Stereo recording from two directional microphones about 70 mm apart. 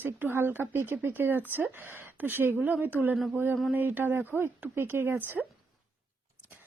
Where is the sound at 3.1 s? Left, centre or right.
Centre.